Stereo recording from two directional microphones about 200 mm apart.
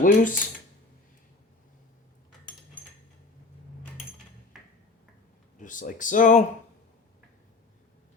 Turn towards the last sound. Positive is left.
turn(degrees=40)  # may be behind; listen again after turning